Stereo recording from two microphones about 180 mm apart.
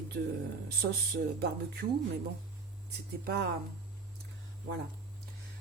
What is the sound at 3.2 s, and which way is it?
Speech, 65° right (ahead or behind).